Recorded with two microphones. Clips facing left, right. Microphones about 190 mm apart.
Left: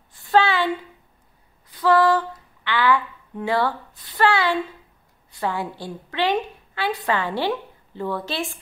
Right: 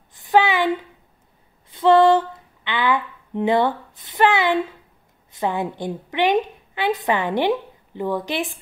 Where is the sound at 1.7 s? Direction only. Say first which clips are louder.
Right 4 dB; 25° right (ahead or behind).